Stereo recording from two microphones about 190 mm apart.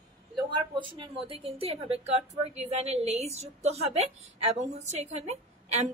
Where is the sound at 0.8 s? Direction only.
25° right (ahead or behind).